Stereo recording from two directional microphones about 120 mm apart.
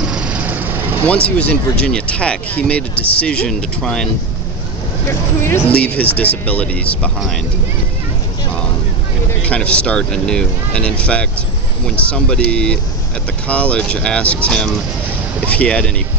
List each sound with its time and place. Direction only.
0.0 s vehicle: 10° right (ahead or behind)
1.0 s speech: 10° left (ahead or behind)
5.0 s speech: 20° left (ahead or behind); by 7.4 s 5° left (ahead or behind)
9.4 s speech: 10° left (ahead or behind)